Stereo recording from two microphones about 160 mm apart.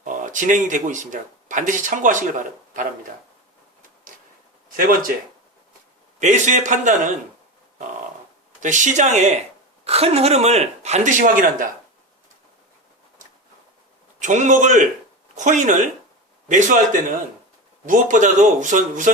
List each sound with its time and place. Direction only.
0.0 s speech: 55° right (ahead or behind)
4.8 s speech: 65° right (ahead or behind)
6.1 s speech: 50° right (ahead or behind)
8.6 s speech: 50° right (ahead or behind)
14.2 s speech: 50° right (ahead or behind)